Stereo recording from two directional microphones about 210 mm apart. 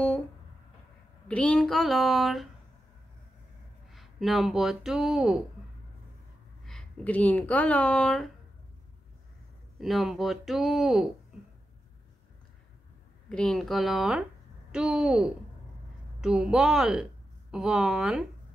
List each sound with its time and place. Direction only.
1.2 s speech: 5° left (ahead or behind)
3.9 s speech: centre (ahead or behind)
6.6 s speech: centre (ahead or behind)
9.8 s speech: centre (ahead or behind)
13.3 s speech: 5° left (ahead or behind)